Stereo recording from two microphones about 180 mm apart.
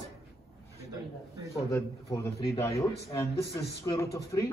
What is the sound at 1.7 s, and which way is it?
Speech, 20° left (ahead or behind).